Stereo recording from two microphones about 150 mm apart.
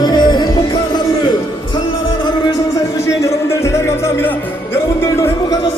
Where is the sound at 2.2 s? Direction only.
30° left (ahead or behind).